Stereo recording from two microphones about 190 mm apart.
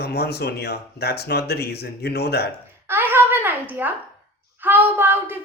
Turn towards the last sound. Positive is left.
turn(degrees=-10)  # may be behind; listen again after turning